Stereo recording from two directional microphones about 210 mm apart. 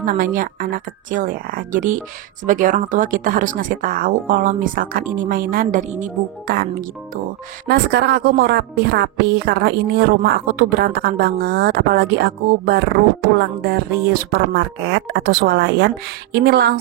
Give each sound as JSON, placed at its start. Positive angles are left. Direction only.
{"t": 0.0, "sound": "a woman's voice", "side_deg": -40}